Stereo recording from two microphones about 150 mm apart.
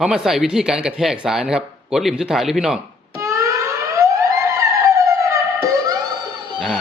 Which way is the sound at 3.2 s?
20° right (ahead or behind).